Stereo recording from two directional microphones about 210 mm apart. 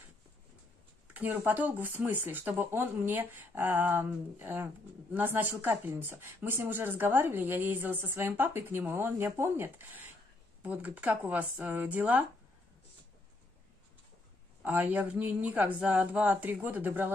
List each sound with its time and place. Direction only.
1.1 s speech: 10° right (ahead or behind)
14.6 s speech: 5° right (ahead or behind)